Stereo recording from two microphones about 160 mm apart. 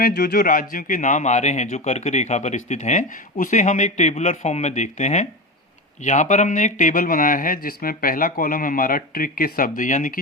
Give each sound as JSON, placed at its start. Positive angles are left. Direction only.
{"t": 0.0, "sound": "speech", "side_deg": 70}